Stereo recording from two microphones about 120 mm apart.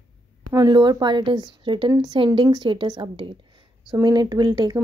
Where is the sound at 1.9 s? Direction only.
30° right (ahead or behind).